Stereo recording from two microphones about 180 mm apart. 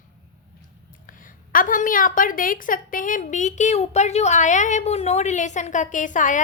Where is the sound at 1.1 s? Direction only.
50° left (ahead or behind).